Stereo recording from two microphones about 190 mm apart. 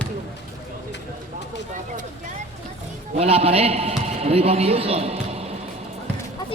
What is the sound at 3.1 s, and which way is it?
A man's voice, 30° right (ahead or behind).